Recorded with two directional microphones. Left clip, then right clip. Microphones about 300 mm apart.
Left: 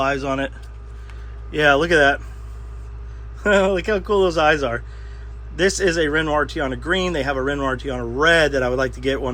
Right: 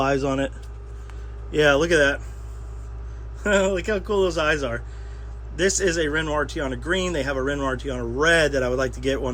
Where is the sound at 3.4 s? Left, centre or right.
Centre.